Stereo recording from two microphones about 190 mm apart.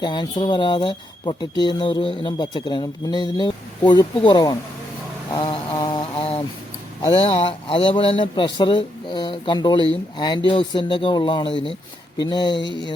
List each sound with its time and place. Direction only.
0.0 s speech: 25° left (ahead or behind)
5.3 s a sound: 20° left (ahead or behind)
7.1 s speech: 30° left (ahead or behind)